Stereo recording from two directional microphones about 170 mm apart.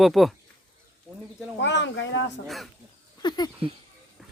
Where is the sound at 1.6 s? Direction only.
90° left.